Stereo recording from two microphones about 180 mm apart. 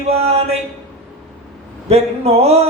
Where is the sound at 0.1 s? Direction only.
35° right (ahead or behind).